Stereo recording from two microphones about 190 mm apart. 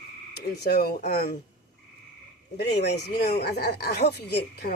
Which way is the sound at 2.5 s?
60° left (ahead or behind).